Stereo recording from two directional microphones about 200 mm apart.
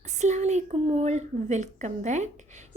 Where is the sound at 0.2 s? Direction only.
35° right (ahead or behind).